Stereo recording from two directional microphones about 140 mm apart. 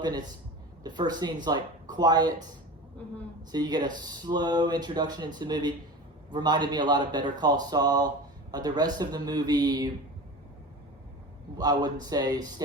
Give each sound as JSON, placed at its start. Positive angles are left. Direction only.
{"t": 0.0, "sound": "speech", "side_deg": -30}
{"t": 3.5, "sound": "speech", "side_deg": -30}
{"t": 11.5, "sound": "speech", "side_deg": -30}